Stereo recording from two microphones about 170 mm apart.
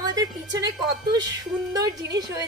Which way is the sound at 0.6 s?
20° right (ahead or behind).